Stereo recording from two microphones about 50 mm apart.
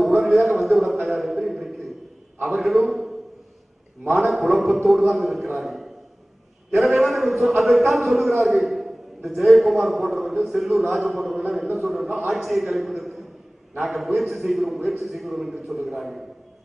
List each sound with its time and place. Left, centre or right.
0.0 s a man's voice: centre
7.0 s a man's voice: centre